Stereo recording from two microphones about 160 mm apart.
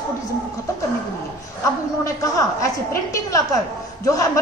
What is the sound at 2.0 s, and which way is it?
Speech, 20° left (ahead or behind).